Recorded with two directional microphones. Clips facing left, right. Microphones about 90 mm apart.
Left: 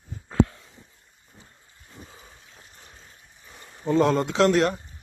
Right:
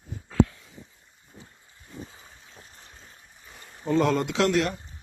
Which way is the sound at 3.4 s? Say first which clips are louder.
Left 2 dB; 35° left (ahead or behind).